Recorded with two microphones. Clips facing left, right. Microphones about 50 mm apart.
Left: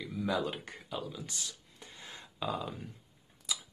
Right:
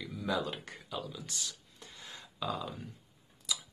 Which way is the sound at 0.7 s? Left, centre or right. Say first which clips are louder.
Left 1 dB; centre.